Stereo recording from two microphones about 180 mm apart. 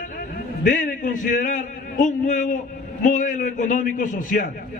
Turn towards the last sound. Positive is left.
turn(degrees=45)  # may be behind; listen again after turning